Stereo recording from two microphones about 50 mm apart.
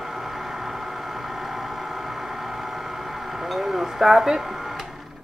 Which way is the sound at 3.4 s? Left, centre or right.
Centre.